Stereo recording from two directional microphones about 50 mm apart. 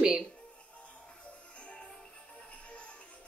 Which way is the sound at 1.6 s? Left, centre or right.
Left.